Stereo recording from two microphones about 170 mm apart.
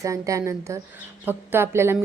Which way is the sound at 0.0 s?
20° right (ahead or behind).